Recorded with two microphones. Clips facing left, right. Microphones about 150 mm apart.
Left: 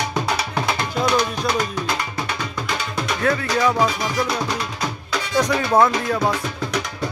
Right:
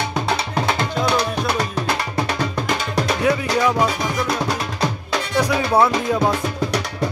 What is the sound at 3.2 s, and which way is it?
Music, 15° right (ahead or behind).